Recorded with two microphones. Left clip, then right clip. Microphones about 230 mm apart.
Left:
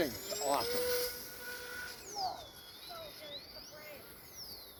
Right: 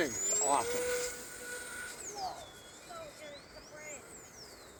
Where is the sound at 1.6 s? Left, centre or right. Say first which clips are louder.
Even; centre.